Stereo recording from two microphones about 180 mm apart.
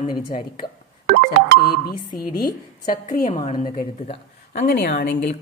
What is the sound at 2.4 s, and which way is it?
A woman's voice, 50° left (ahead or behind).